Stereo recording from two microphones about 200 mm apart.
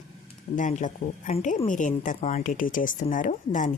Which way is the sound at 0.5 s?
40° left (ahead or behind).